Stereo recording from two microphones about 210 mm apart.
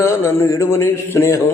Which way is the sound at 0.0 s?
10° left (ahead or behind).